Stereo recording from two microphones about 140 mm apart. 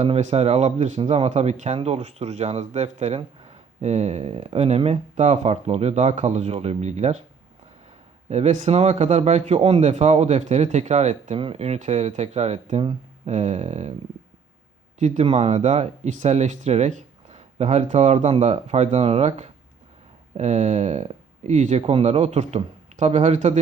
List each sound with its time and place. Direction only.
0.0 s speech: 55° right (ahead or behind)
8.3 s speech: 55° right (ahead or behind)
11.3 s speech: 45° right (ahead or behind)
14.9 s speech: 55° right (ahead or behind)